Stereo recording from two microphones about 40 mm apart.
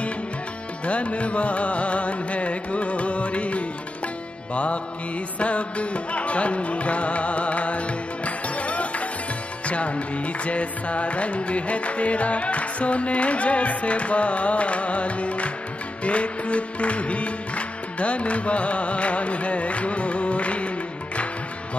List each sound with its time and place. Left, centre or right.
0.8 s music: left
5.4 s music: left